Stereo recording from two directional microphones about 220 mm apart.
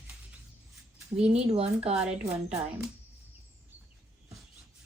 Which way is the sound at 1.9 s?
5° right (ahead or behind).